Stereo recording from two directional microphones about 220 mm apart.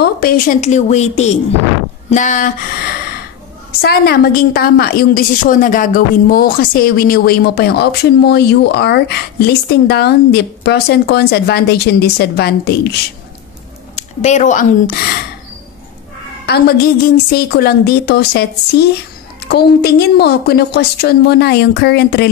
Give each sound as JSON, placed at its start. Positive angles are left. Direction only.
{"t": 0.0, "sound": "a woman's voice", "side_deg": 40}
{"t": 3.8, "sound": "a woman's voice", "side_deg": 45}
{"t": 13.9, "sound": "speech", "side_deg": 30}
{"t": 16.4, "sound": "a woman's voice", "side_deg": 45}